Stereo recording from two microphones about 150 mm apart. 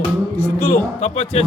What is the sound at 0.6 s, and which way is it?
Speech, 45° left (ahead or behind).